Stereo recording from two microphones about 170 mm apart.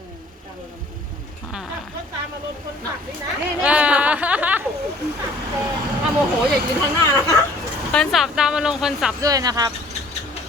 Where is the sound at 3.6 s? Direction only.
5° right (ahead or behind).